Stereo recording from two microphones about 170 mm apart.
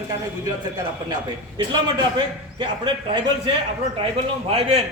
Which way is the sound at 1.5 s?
25° right (ahead or behind).